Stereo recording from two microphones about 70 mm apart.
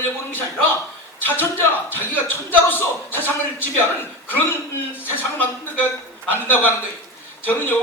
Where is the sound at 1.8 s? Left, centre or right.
Left.